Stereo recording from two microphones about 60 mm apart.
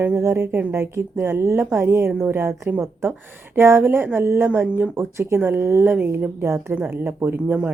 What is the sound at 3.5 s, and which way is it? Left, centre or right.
A woman's voice, right.